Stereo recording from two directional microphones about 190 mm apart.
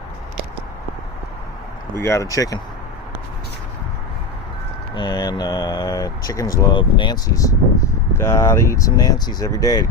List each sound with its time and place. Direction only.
2.0 s speech: 15° left (ahead or behind)
4.9 s speech: 20° left (ahead or behind)